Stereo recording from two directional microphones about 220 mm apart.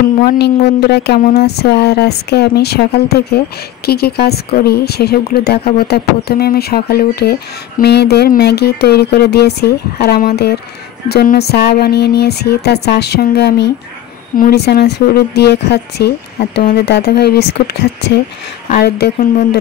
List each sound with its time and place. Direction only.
0.2 s speech: 50° left (ahead or behind)
18.7 s speech: 45° left (ahead or behind)